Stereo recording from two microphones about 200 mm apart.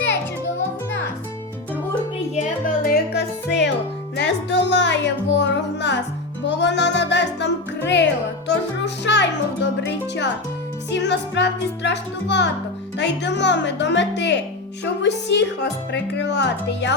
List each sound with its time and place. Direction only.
2.3 s music: 40° left (ahead or behind)
4.2 s speech: 60° left (ahead or behind)
6.5 s music: 60° left (ahead or behind)
9.0 s speech: 60° left (ahead or behind)